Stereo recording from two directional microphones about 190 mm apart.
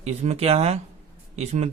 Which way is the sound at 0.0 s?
35° right (ahead or behind).